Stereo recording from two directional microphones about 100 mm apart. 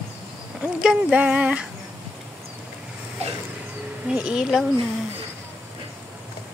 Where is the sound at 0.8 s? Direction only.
5° right (ahead or behind).